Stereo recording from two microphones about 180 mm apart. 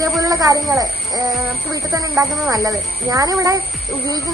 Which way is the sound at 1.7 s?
20° right (ahead or behind).